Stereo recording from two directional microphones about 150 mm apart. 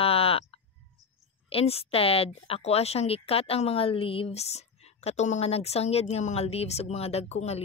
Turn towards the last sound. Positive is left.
turn(degrees=45)  # may be behind; listen again after turning